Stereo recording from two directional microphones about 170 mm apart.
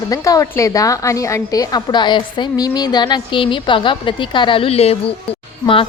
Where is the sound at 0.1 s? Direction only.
20° left (ahead or behind).